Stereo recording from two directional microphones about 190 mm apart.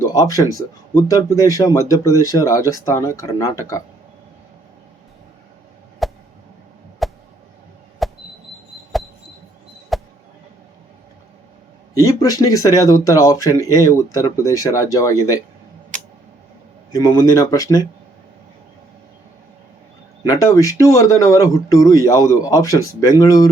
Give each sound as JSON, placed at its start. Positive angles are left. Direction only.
{"t": 0.0, "sound": "speech", "side_deg": 20}
{"t": 6.0, "sound": "a sound", "side_deg": 0}
{"t": 9.9, "sound": "basketball bounce", "side_deg": 0}
{"t": 11.9, "sound": "speech", "side_deg": 20}
{"t": 16.9, "sound": "speech", "side_deg": 20}
{"t": 20.2, "sound": "speech", "side_deg": 15}